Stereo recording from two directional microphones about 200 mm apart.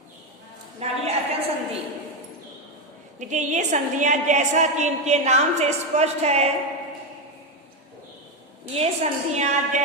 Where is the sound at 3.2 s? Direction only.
35° right (ahead or behind).